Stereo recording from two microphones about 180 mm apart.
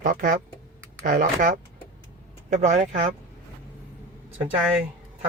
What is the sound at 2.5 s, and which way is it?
Speech, 40° right (ahead or behind).